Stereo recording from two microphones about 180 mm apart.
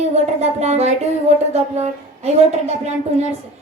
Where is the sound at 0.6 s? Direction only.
35° right (ahead or behind).